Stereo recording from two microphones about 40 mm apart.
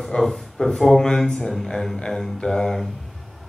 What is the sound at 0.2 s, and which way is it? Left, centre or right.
Speech, centre.